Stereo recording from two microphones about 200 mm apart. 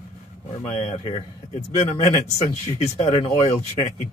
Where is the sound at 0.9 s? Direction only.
35° left (ahead or behind).